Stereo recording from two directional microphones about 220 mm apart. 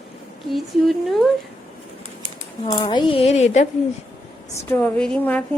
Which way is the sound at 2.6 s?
20° left (ahead or behind).